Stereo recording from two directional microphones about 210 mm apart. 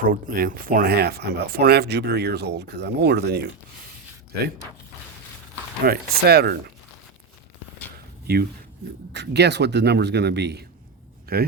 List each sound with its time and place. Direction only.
0.0 s speech: 40° right (ahead or behind)
5.8 s speech: 50° right (ahead or behind)
8.3 s speech: 50° right (ahead or behind)